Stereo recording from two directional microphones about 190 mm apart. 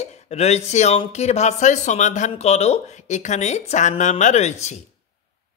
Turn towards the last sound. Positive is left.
turn(degrees=35)  # may be behind; listen again after turning